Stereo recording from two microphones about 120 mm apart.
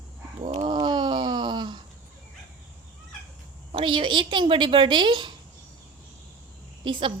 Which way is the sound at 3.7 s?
45° right (ahead or behind).